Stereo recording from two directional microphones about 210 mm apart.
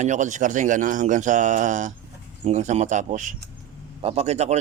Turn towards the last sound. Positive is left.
turn(degrees=-30)  # may be behind; listen again after turning